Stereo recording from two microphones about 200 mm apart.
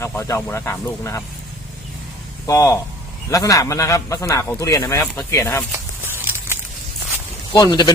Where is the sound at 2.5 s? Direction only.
15° left (ahead or behind).